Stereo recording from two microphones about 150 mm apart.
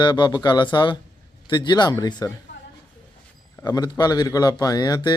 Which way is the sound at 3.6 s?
25° left (ahead or behind).